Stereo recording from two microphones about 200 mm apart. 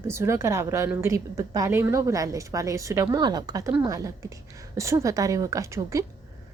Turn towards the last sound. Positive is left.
turn(degrees=-15)  # may be behind; listen again after turning